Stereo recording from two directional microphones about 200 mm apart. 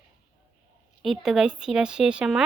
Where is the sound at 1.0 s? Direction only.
Centre (ahead or behind).